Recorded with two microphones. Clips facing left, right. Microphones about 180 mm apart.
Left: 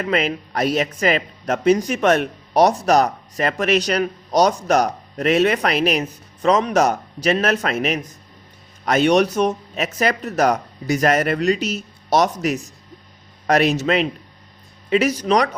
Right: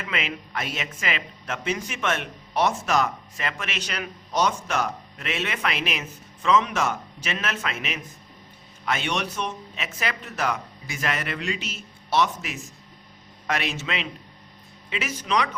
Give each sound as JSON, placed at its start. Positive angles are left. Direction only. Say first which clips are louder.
{"t": 0.0, "sound": "speech", "louder": "left 10 dB", "side_deg": 40}